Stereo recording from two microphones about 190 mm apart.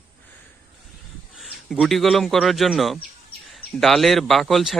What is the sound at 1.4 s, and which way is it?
A man's voice, centre (ahead or behind).